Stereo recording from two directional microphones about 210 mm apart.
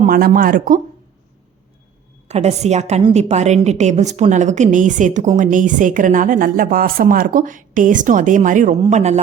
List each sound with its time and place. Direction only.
0.0 s a woman's voice: 40° right (ahead or behind)
2.2 s a woman's voice: 30° right (ahead or behind)